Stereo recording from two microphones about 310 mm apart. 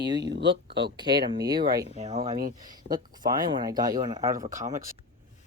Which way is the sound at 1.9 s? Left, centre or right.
Right.